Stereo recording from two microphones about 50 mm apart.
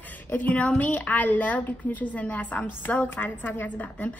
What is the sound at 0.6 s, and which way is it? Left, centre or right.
A woman's voice, left.